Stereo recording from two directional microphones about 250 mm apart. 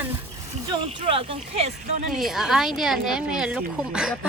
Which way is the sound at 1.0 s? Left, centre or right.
Right.